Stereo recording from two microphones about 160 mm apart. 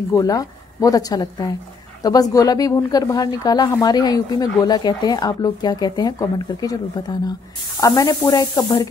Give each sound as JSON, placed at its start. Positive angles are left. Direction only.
{"t": 0.1, "sound": "speech", "side_deg": 20}